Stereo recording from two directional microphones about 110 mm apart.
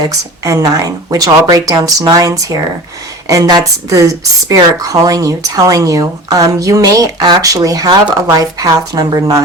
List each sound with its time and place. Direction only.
0.0 s speech: 30° right (ahead or behind)